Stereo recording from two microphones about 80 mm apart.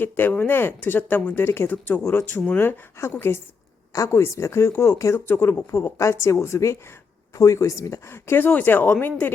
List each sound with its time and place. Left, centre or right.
0.0 s speech: left
3.9 s speech: left
5.3 s speech: left